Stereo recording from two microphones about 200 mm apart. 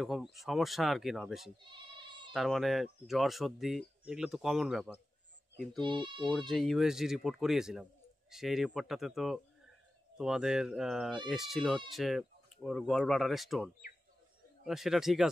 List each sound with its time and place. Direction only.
0.0 s speech: centre (ahead or behind)
5.8 s speech: 25° right (ahead or behind)
6.3 s speech: centre (ahead or behind)